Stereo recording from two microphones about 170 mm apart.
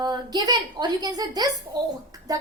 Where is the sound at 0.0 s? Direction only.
25° right (ahead or behind).